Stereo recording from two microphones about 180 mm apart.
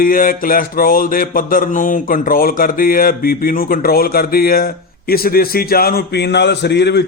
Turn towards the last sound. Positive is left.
turn(degrees=70)  # may be behind; listen again after turning